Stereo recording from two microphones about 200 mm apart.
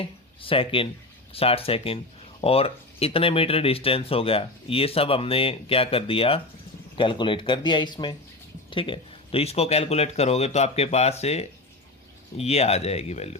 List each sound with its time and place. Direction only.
0.0 s speech: 25° left (ahead or behind)